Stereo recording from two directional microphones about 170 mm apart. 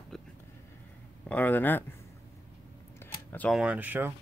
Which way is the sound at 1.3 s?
10° left (ahead or behind).